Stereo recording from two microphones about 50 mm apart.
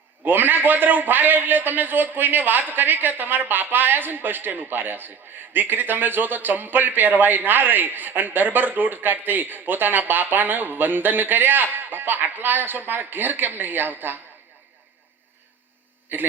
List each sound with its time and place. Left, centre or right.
0.3 s a man's voice: right
16.1 s a man's voice: right